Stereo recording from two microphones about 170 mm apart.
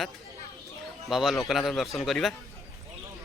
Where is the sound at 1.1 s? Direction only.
Centre (ahead or behind).